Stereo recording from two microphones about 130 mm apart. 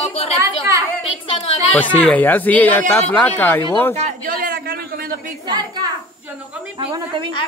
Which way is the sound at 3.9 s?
75° right (ahead or behind).